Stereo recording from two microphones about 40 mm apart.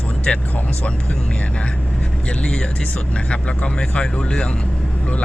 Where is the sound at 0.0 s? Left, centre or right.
Left.